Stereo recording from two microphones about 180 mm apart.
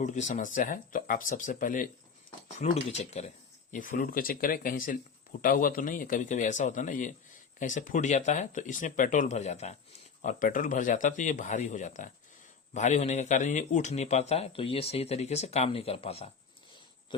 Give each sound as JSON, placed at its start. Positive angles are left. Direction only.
{"t": 0.0, "sound": "speech", "side_deg": 40}
{"t": 2.7, "sound": "a man's voice", "side_deg": 35}